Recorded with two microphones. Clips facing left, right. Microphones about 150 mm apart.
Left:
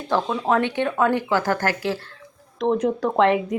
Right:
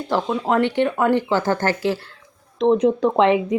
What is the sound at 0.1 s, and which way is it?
Speech, 15° right (ahead or behind).